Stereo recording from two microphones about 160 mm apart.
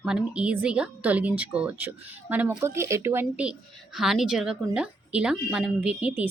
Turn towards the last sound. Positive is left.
turn(degrees=-10)  # may be behind; listen again after turning